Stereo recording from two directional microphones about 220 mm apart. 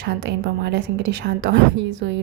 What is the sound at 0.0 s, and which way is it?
Speech, 50° right (ahead or behind).